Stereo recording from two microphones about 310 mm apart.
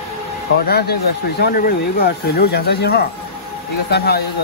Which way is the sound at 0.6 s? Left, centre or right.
Left.